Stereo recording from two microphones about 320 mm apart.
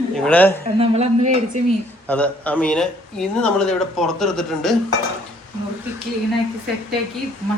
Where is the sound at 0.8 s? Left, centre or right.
Centre.